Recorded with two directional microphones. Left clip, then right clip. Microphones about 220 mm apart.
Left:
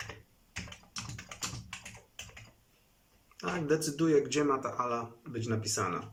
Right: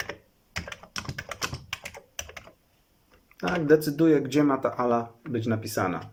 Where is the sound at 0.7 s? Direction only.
45° right (ahead or behind).